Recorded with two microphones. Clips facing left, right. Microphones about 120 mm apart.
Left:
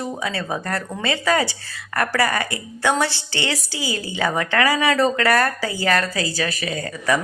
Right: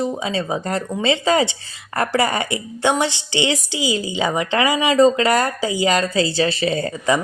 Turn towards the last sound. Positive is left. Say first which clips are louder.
# right 3 dB
turn(degrees=-25)  # may be behind; listen again after turning